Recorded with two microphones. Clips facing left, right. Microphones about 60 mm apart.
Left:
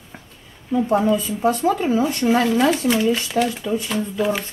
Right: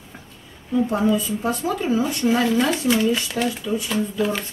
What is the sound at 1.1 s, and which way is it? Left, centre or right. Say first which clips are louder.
Speech: left 3 dB; left.